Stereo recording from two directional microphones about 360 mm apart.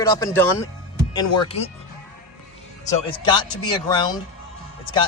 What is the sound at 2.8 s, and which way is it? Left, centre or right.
Speech, centre.